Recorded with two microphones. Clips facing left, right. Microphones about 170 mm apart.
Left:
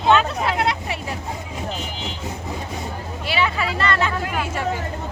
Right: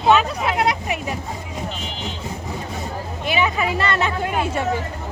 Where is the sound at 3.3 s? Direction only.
20° right (ahead or behind).